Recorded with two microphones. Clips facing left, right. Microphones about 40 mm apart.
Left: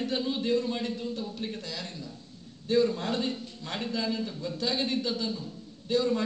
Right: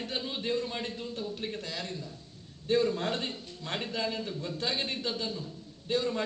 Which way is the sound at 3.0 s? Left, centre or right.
Right.